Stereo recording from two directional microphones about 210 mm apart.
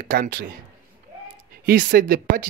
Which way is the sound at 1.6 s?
40° right (ahead or behind).